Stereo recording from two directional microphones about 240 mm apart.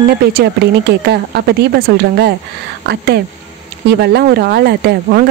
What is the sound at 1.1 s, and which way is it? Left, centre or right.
Speech, right.